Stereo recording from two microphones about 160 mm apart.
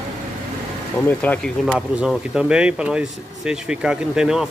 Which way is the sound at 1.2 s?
10° left (ahead or behind).